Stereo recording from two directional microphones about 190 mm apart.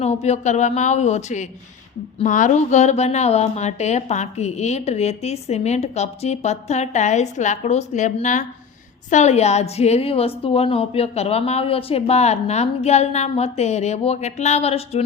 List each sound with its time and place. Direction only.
0.0 s a woman's voice: 35° left (ahead or behind)